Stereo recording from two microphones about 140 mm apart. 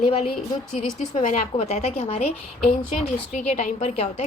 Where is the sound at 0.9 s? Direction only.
55° left (ahead or behind).